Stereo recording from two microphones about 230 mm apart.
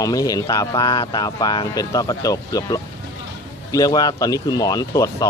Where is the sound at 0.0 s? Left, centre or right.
Centre.